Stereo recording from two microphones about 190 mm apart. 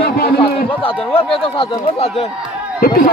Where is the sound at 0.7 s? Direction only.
30° left (ahead or behind).